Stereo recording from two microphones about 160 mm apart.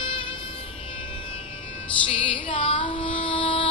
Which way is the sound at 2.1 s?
35° left (ahead or behind).